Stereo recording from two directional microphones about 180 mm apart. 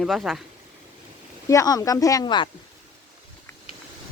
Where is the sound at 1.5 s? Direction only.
20° left (ahead or behind).